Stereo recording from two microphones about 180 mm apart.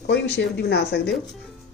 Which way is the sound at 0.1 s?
70° left (ahead or behind).